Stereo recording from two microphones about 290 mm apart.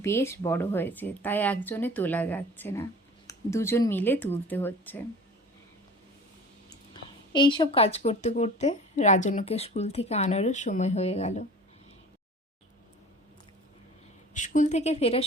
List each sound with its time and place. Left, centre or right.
0.0 s speech: centre
6.9 s a woman's voice: centre
14.3 s a woman's voice: left